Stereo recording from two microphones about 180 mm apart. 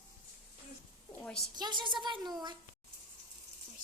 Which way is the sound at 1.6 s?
25° right (ahead or behind).